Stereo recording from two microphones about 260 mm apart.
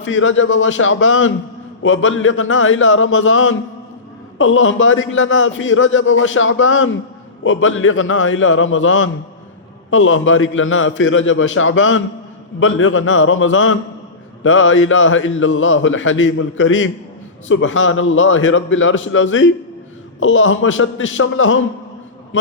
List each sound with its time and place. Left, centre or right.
0.0 s a man's voice: left